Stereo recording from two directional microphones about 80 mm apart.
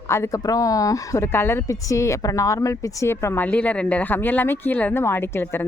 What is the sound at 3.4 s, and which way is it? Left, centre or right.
Speech, centre.